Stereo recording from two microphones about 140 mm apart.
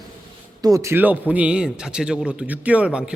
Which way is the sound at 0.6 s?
25° right (ahead or behind).